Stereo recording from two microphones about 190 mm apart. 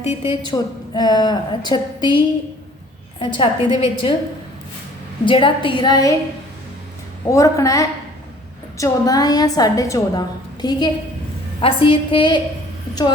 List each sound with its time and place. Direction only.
0.0 s a woman's voice: 30° left (ahead or behind)
5.2 s a woman's voice: 25° left (ahead or behind)
7.3 s a woman's voice: 15° left (ahead or behind)